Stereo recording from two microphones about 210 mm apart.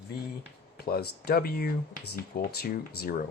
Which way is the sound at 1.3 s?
45° left (ahead or behind).